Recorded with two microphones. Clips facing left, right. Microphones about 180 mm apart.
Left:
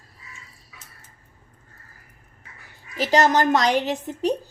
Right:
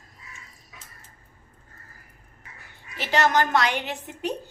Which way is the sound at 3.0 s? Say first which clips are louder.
Left 4 dB; 40° left (ahead or behind).